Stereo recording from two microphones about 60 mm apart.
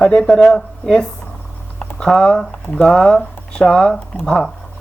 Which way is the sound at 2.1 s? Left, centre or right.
Centre.